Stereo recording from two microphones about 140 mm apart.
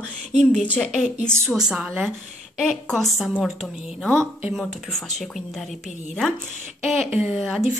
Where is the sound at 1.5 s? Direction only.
5° right (ahead or behind).